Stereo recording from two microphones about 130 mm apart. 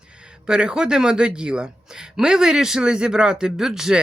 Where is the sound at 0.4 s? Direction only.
5° right (ahead or behind).